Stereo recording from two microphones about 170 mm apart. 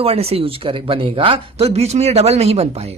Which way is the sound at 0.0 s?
35° right (ahead or behind).